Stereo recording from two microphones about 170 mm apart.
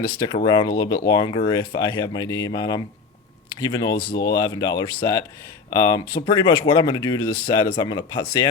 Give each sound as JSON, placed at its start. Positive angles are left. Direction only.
{"t": 0.4, "sound": "speech", "side_deg": 25}
{"t": 4.1, "sound": "speech", "side_deg": 85}
{"t": 4.4, "sound": "speech", "side_deg": 25}